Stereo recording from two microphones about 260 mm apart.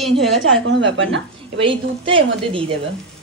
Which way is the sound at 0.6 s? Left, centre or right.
Right.